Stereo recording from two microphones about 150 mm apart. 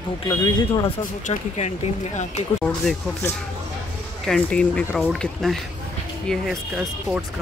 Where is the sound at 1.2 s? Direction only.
55° left (ahead or behind).